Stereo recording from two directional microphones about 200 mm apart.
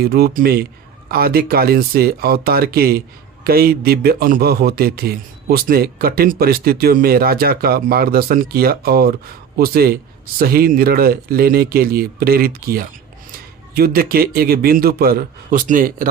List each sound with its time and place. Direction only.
0.0 s a man's voice: 50° right (ahead or behind)